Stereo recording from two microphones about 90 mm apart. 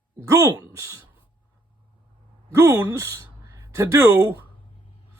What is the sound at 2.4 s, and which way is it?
Speech, 35° right (ahead or behind).